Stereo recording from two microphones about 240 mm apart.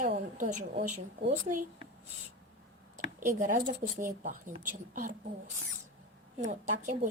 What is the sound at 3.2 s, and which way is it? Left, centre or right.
Speech, right.